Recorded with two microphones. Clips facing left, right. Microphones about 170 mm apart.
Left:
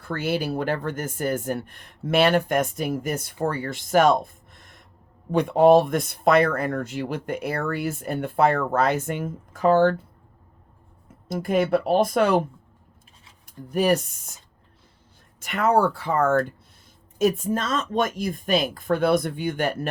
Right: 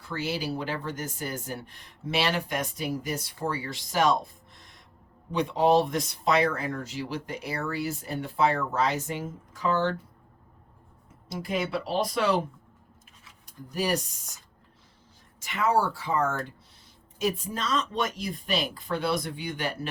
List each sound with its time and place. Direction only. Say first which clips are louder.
0.0 s speech: left 6 dB; 55° left (ahead or behind)
11.3 s speech: left 9 dB; 55° left (ahead or behind)
13.7 s speech: left 7 dB; 55° left (ahead or behind)
15.4 s speech: left 5 dB; 55° left (ahead or behind)